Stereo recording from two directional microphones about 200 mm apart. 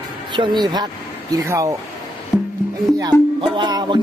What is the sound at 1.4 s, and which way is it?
Speech, 15° right (ahead or behind).